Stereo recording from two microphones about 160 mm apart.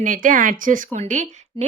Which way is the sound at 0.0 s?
55° right (ahead or behind).